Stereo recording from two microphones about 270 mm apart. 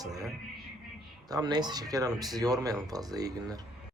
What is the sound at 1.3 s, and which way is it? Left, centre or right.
Speech, centre.